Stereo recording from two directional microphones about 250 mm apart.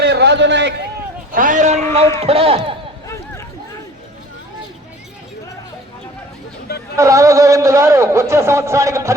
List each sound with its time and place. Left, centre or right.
0.0 s run: right
1.3 s a man's voice: right
6.9 s a man's voice: centre